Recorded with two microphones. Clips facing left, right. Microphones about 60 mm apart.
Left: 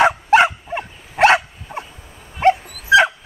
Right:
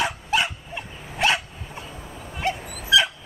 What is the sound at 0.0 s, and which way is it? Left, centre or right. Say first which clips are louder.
Dog: left 11 dB; left.